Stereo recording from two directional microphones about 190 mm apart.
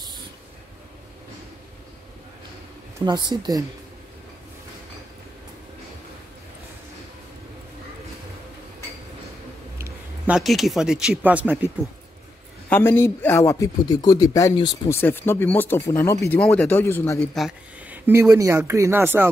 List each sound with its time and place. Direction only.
3.3 s speech: 20° right (ahead or behind)
9.8 s speech: 10° right (ahead or behind)
12.6 s speech: 10° left (ahead or behind)
17.4 s speech: 5° right (ahead or behind)